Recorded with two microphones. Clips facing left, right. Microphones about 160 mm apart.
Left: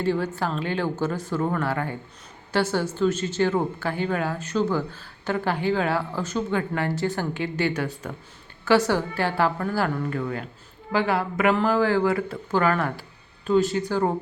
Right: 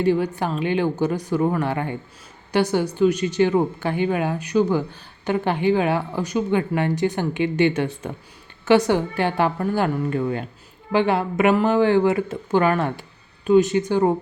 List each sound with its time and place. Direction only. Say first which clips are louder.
0.0 s a woman's voice: right 4 dB; 15° right (ahead or behind)